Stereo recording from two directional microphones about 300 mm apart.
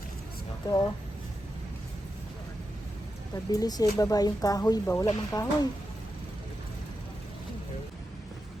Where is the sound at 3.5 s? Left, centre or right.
Centre.